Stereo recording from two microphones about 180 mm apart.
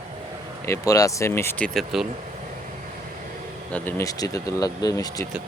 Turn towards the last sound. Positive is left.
turn(degrees=20)  # may be behind; listen again after turning